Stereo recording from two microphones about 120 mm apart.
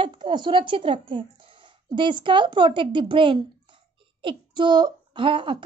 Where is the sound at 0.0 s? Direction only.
40° right (ahead or behind).